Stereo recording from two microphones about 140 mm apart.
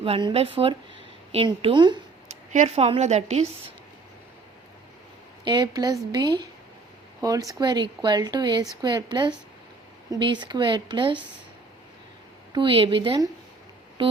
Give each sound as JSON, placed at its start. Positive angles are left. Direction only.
{"t": 0.0, "sound": "a woman's voice", "side_deg": -35}
{"t": 2.3, "sound": "a woman's voice", "side_deg": -55}
{"t": 5.5, "sound": "a woman's voice", "side_deg": -30}
{"t": 12.5, "sound": "a woman's voice", "side_deg": -35}